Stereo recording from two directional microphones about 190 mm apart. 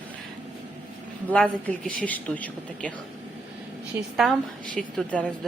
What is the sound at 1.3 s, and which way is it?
Speech, 5° left (ahead or behind).